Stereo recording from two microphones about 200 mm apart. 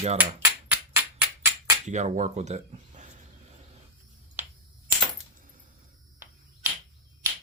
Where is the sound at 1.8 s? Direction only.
35° right (ahead or behind).